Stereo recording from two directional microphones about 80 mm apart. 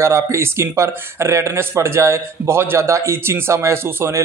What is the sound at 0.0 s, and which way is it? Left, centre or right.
Speech, right.